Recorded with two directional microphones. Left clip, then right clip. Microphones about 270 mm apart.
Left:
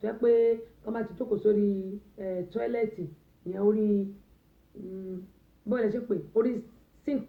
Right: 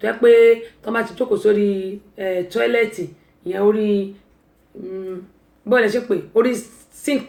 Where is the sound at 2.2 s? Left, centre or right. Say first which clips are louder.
Right 12 dB; centre.